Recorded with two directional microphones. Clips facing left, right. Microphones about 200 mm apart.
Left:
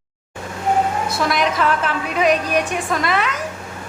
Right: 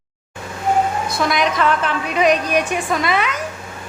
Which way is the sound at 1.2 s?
Centre (ahead or behind).